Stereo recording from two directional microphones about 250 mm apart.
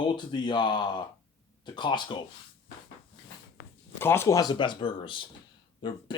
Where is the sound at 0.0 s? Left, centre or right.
Centre.